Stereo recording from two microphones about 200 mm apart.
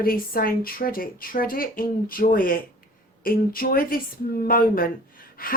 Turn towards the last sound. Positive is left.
turn(degrees=45)  # may be behind; listen again after turning